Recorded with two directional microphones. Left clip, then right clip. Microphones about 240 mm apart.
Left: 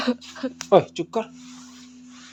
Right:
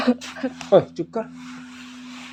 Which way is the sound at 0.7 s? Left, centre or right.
Left.